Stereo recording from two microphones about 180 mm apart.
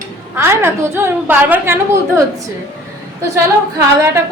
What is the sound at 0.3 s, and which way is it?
A woman's voice, 15° right (ahead or behind).